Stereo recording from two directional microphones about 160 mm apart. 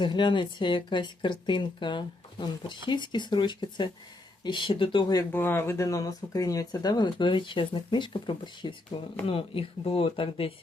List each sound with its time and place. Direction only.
0.0 s speech: 30° left (ahead or behind)
5.3 s speech: 15° left (ahead or behind); by 10.5 s 35° left (ahead or behind)